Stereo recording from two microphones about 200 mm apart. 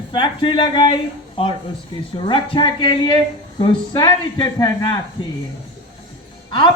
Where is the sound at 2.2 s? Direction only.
25° left (ahead or behind).